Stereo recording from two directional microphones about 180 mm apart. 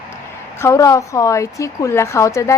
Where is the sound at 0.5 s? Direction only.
15° left (ahead or behind).